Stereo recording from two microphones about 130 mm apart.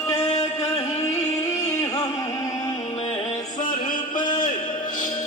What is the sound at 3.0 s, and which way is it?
Music, 50° left (ahead or behind).